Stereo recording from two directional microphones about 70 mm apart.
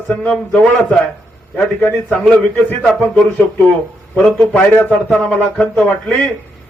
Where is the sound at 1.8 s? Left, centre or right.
Left.